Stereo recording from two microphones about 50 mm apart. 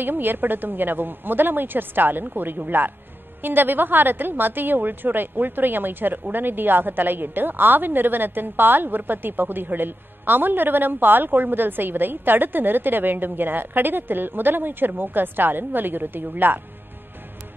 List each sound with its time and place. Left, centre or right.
0.0 s a woman's voice: right